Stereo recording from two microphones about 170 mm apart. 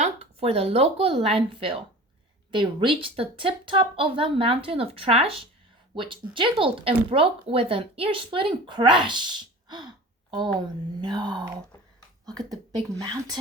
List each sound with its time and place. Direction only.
0.0 s speech: 40° right (ahead or behind)
11.1 s speech: 25° right (ahead or behind)